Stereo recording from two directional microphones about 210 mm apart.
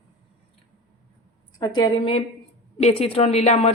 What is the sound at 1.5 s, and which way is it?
A woman's voice, 20° left (ahead or behind).